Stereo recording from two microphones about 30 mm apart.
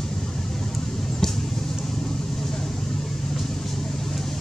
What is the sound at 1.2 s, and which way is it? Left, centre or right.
Vehicle, centre.